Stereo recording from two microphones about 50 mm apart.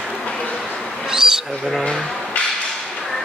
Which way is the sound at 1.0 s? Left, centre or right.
Centre.